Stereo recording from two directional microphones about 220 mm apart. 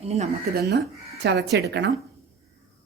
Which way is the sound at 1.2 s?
50° right (ahead or behind).